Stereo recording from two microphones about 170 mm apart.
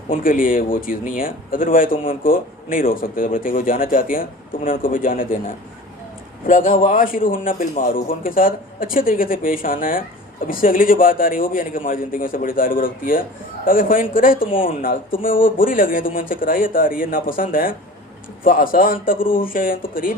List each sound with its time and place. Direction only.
0.1 s speech: 55° left (ahead or behind)
6.5 s speech: 50° left (ahead or behind)